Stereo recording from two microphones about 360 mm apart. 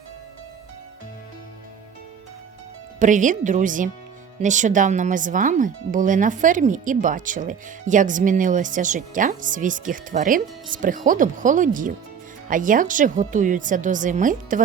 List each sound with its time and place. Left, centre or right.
3.0 s speech: right